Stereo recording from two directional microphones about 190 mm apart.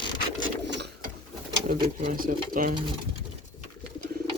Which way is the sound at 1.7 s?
50° right (ahead or behind).